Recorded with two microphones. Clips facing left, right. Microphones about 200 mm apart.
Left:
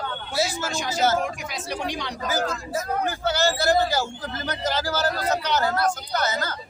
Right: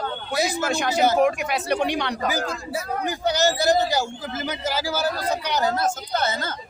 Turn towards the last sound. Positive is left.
turn(degrees=-25)  # may be behind; listen again after turning